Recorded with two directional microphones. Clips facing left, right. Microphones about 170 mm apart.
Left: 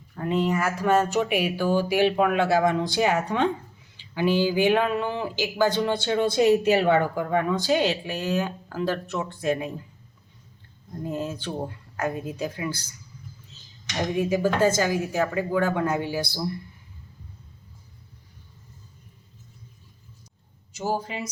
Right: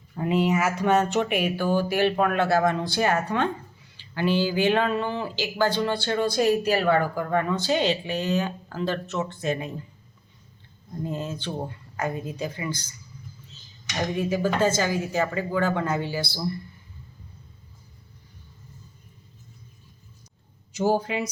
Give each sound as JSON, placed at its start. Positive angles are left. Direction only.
{"t": 0.2, "sound": "speech", "side_deg": -10}
{"t": 11.0, "sound": "speech", "side_deg": 5}
{"t": 14.2, "sound": "speech", "side_deg": 15}
{"t": 20.7, "sound": "speech", "side_deg": -65}